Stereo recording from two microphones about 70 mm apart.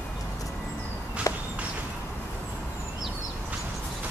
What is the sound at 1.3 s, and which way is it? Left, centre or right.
Walk, left.